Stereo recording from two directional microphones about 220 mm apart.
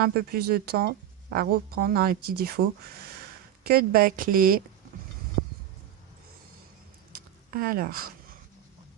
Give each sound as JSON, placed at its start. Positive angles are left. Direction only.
{"t": 0.0, "sound": "a woman's voice", "side_deg": -45}
{"t": 7.5, "sound": "speech", "side_deg": -40}